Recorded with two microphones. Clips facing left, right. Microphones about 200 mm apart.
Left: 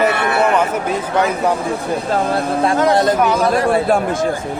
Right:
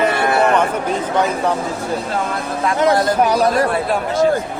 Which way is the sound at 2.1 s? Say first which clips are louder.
Left 5 dB; 35° left (ahead or behind).